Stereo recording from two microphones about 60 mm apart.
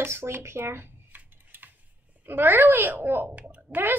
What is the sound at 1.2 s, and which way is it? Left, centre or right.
Typing, right.